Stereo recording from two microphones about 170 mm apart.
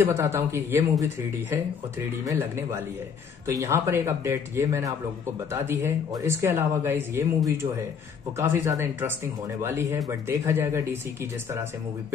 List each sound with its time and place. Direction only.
0.0 s a man's voice: 15° right (ahead or behind)